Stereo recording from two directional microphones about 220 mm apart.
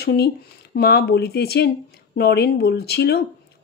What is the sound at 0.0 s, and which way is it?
Speech, 45° left (ahead or behind).